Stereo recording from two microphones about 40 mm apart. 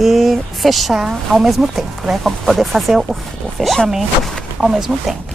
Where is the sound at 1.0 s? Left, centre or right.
Centre.